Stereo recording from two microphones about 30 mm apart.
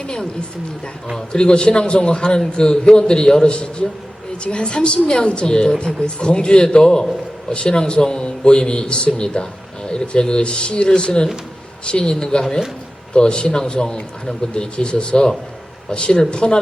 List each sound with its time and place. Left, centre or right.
0.0 s speech: left
1.3 s a man's voice: left
3.5 s a man's voice: left